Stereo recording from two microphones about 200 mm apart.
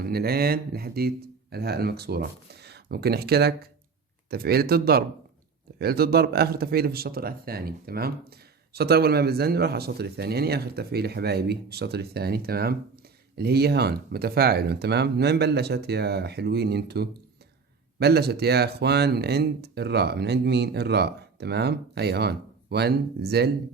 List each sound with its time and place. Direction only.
0.0 s speech: 50° right (ahead or behind)